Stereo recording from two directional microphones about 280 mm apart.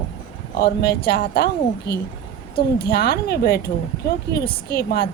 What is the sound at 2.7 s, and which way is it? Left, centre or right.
A woman's voice, left.